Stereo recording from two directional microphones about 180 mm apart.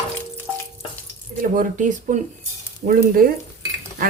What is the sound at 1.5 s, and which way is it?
Speech, 45° right (ahead or behind).